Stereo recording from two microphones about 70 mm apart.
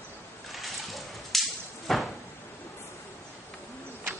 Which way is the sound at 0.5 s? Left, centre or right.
Centre.